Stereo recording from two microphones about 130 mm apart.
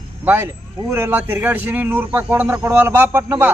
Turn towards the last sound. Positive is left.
turn(degrees=-15)  # may be behind; listen again after turning